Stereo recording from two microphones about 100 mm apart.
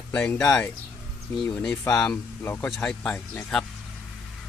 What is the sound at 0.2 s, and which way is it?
Speech, 10° left (ahead or behind).